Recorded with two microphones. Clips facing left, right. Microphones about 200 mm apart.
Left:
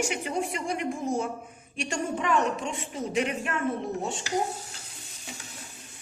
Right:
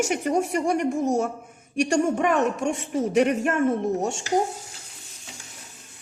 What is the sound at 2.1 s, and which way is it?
A woman's voice, 55° right (ahead or behind).